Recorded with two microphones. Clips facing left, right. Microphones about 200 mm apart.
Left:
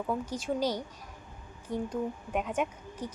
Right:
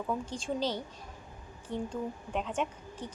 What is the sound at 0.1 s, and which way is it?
A woman's voice, 10° left (ahead or behind).